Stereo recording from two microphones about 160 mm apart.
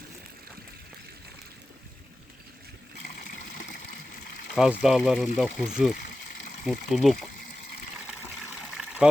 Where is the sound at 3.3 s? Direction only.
60° left (ahead or behind).